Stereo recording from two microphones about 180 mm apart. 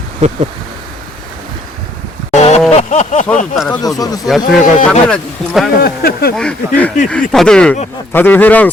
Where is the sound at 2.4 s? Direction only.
35° left (ahead or behind).